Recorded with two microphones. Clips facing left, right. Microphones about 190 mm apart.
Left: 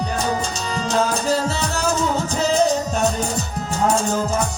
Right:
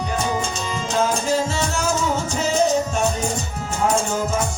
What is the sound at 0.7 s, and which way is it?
Music, 35° left (ahead or behind).